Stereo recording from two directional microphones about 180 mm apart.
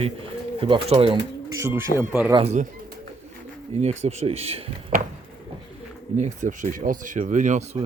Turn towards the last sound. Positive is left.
turn(degrees=-45)  # may be behind; listen again after turning